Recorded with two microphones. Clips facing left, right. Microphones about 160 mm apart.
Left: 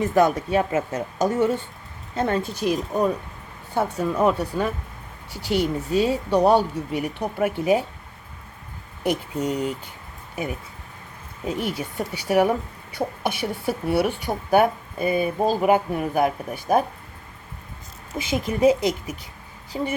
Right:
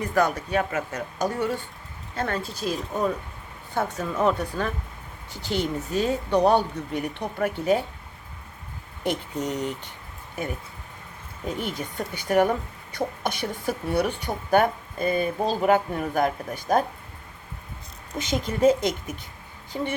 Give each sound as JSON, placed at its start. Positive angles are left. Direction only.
{"t": 0.0, "sound": "speech", "side_deg": 20}
{"t": 9.0, "sound": "speech", "side_deg": 10}
{"t": 11.4, "sound": "speech", "side_deg": 5}
{"t": 18.1, "sound": "speech", "side_deg": 5}